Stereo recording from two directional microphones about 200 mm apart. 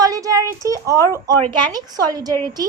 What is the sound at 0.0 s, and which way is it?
Speech, 20° right (ahead or behind).